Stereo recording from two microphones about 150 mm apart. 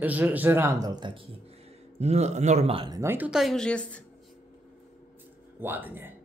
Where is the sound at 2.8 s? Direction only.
25° right (ahead or behind).